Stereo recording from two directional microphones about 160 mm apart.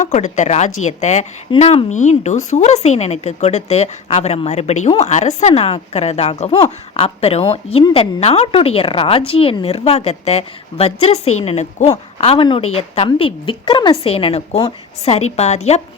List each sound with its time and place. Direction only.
0.0 s a woman's voice: 45° left (ahead or behind)